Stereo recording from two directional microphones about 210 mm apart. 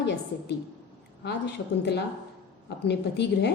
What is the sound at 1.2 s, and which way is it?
A woman's voice, 55° left (ahead or behind).